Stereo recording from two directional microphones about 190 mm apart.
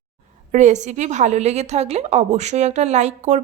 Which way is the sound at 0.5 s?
40° right (ahead or behind).